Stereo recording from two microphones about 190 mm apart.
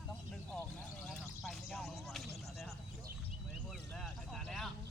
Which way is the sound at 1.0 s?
Centre (ahead or behind).